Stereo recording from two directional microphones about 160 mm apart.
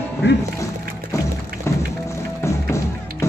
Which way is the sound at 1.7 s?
15° left (ahead or behind).